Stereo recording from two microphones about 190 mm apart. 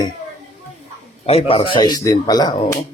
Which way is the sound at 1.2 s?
30° left (ahead or behind).